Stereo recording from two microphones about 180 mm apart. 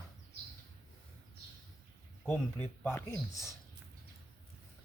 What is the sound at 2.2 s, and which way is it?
Speech, 5° left (ahead or behind).